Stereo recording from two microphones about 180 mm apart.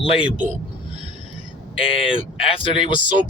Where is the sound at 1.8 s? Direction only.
30° left (ahead or behind).